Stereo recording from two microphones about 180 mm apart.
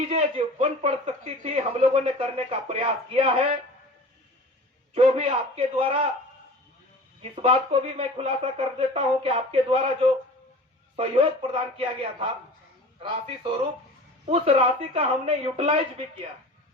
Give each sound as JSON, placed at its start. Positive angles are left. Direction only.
{"t": 0.1, "sound": "speech", "side_deg": -35}
{"t": 4.9, "sound": "speech", "side_deg": -30}
{"t": 7.2, "sound": "speech", "side_deg": -30}
{"t": 14.3, "sound": "speech", "side_deg": -35}